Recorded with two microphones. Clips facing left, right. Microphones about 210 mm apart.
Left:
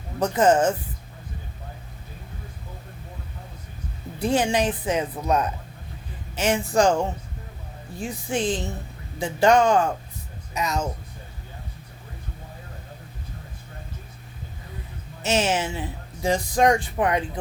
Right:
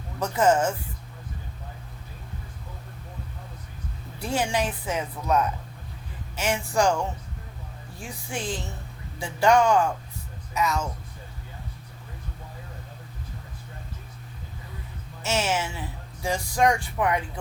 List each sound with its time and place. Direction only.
0.2 s speech: 20° left (ahead or behind)
4.2 s speech: 20° left (ahead or behind)
15.2 s speech: 20° left (ahead or behind)